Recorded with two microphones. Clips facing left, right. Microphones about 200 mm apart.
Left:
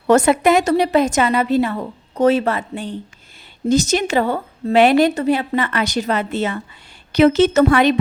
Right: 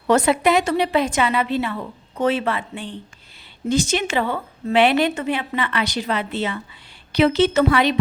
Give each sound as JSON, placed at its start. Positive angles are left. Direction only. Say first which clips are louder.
{"t": 0.1, "sound": "a woman's voice", "louder": "left 4 dB", "side_deg": 45}